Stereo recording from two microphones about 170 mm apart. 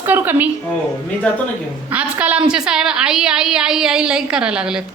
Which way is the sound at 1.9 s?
10° right (ahead or behind).